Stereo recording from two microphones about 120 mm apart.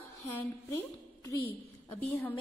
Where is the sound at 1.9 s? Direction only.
20° left (ahead or behind).